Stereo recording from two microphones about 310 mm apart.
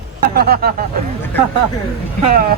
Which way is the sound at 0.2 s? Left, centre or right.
Right.